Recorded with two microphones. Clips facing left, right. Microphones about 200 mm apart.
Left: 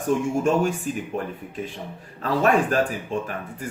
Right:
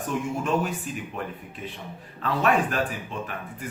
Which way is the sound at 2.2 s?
40° left (ahead or behind).